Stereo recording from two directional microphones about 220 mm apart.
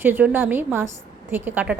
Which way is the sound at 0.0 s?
10° right (ahead or behind).